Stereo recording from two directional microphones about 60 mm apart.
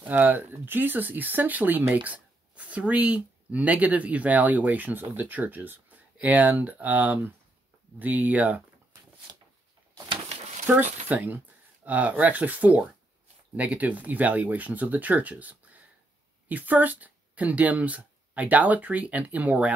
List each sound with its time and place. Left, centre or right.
0.0 s speech: right
10.8 s speech: right